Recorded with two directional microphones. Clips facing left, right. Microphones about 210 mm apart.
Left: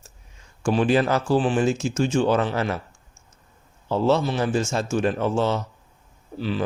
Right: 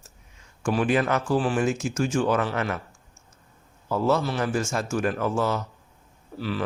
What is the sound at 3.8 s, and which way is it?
Speech, 30° left (ahead or behind).